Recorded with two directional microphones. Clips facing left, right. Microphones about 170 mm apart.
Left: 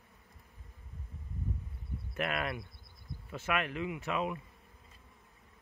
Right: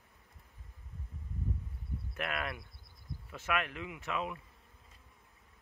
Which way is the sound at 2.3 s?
10° left (ahead or behind).